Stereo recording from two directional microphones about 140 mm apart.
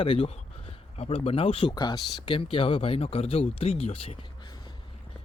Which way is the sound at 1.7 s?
30° left (ahead or behind).